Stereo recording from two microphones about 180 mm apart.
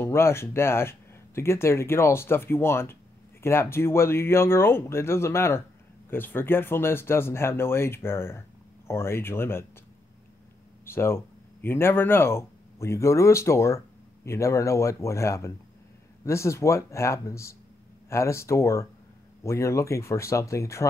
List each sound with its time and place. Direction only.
0.0 s speech: 15° left (ahead or behind)
10.9 s speech: 15° left (ahead or behind)